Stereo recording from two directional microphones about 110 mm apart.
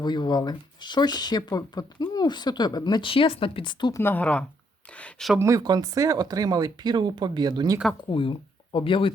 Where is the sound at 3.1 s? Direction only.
55° left (ahead or behind).